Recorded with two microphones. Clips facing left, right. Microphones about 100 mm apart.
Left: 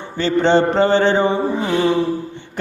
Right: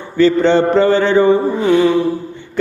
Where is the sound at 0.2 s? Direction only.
30° left (ahead or behind).